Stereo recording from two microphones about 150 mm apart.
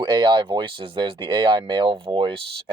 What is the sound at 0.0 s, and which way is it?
Speech, 30° right (ahead or behind).